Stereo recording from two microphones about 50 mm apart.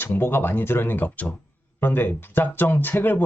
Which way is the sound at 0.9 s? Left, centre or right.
Left.